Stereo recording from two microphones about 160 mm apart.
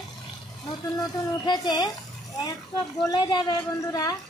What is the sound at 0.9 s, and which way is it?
Speech, 25° left (ahead or behind).